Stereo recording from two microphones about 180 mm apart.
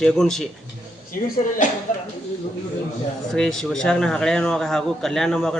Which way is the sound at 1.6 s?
45° left (ahead or behind).